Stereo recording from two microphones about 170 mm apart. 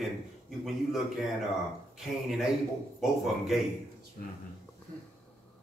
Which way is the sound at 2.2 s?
Centre (ahead or behind).